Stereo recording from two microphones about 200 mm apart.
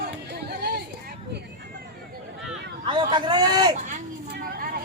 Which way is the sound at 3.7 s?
40° right (ahead or behind).